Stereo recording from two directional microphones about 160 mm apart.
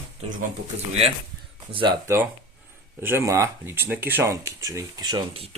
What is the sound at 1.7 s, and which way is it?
Speech, 30° right (ahead or behind).